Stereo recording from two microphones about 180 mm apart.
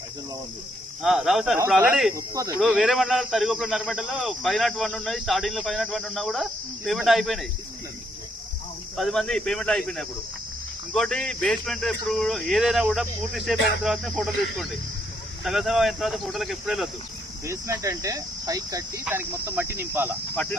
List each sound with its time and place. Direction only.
1.0 s speech: centre (ahead or behind)
2.1 s speech: 20° right (ahead or behind)
2.6 s speech: centre (ahead or behind)
9.0 s speech: centre (ahead or behind)
17.4 s speech: 15° right (ahead or behind)
20.3 s speech: 5° left (ahead or behind)